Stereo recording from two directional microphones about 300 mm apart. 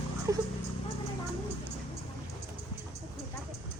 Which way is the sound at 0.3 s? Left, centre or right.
Centre.